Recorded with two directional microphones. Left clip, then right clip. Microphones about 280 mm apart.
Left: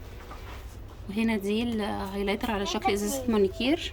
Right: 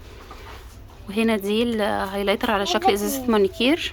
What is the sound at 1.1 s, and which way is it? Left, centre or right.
A woman's voice, centre.